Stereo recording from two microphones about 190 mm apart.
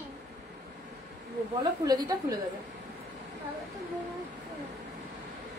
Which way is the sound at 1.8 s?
20° right (ahead or behind).